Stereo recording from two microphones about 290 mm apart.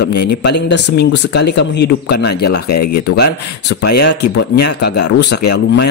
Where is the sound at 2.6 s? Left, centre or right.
Left.